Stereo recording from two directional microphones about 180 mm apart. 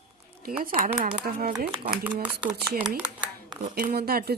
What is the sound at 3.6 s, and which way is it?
Speech, 55° right (ahead or behind).